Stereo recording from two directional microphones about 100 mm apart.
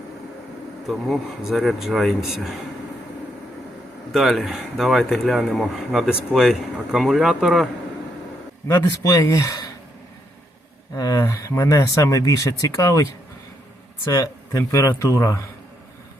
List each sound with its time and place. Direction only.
0.9 s speech: centre (ahead or behind)
4.1 s speech: centre (ahead or behind)
8.6 s speech: 30° left (ahead or behind)
10.9 s speech: 35° left (ahead or behind)